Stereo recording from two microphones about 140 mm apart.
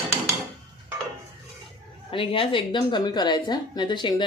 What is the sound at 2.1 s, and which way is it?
Speech, 40° left (ahead or behind).